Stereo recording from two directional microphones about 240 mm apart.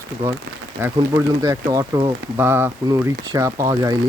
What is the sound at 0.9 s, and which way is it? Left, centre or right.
Speech, centre.